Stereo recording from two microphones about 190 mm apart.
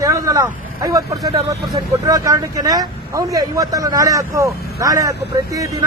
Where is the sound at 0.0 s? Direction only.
15° right (ahead or behind).